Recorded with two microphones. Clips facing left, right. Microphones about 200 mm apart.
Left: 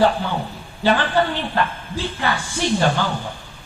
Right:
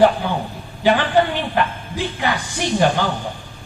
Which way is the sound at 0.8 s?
15° right (ahead or behind).